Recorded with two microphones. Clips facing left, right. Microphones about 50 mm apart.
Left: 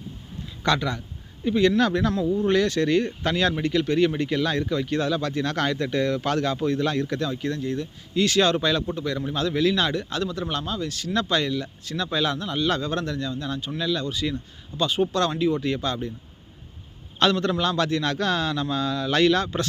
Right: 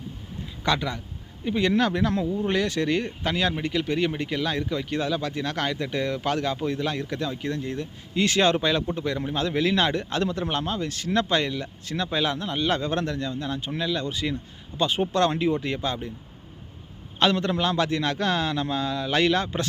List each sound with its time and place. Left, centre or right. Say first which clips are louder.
0.6 s a man's voice: left 2 dB; centre
17.2 s a man's voice: left 1 dB; centre